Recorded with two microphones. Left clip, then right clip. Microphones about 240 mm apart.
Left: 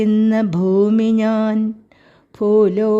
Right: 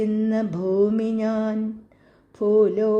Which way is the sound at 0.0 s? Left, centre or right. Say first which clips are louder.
Left 6 dB; left.